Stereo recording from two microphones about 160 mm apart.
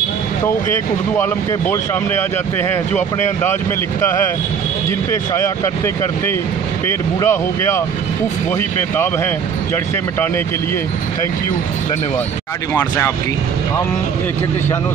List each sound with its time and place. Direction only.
6.9 s speech: 15° left (ahead or behind)
8.9 s speech: 15° left (ahead or behind)
12.7 s speech: 15° left (ahead or behind)